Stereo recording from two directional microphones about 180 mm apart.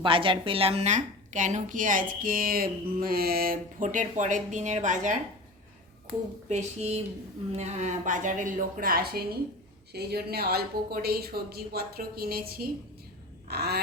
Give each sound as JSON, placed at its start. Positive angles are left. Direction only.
{"t": 0.0, "sound": "a woman's voice", "side_deg": -30}
{"t": 6.5, "sound": "a woman's voice", "side_deg": -35}